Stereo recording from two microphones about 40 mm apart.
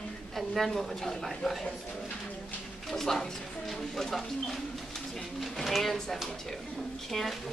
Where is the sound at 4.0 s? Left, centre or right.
Centre.